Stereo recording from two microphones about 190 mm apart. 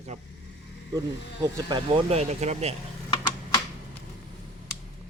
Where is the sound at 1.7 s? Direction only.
25° right (ahead or behind).